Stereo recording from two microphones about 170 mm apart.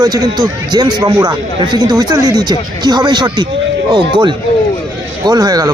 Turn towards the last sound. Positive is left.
turn(degrees=-20)  # may be behind; listen again after turning